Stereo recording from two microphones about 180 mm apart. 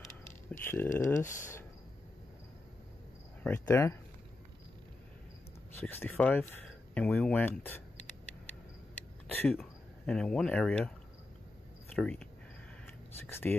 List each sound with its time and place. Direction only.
0.5 s speech: 10° left (ahead or behind)
1.2 s speech: 45° left (ahead or behind)
3.4 s speech: 15° left (ahead or behind)
5.8 s speech: 10° left (ahead or behind)
9.6 s speech: 5° left (ahead or behind)
11.9 s speech: 5° left (ahead or behind)
13.3 s speech: 10° left (ahead or behind)